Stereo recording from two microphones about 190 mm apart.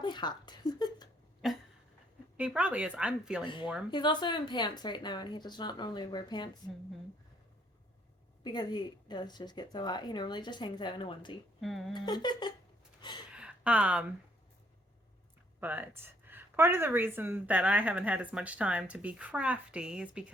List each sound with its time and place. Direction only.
0.0 s speech: 25° left (ahead or behind)
1.4 s a sound: centre (ahead or behind)
2.4 s speech: 5° right (ahead or behind)
3.4 s speech: 25° left (ahead or behind)
8.4 s speech: 25° left (ahead or behind)
11.6 s speech: centre (ahead or behind)
11.9 s speech: 25° left (ahead or behind)
13.0 s a sound: 25° left (ahead or behind)
13.3 s a sound: 5° right (ahead or behind)
15.6 s speech: 10° right (ahead or behind)